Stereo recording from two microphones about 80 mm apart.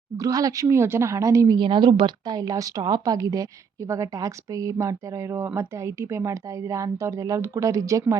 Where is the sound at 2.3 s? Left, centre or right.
Right.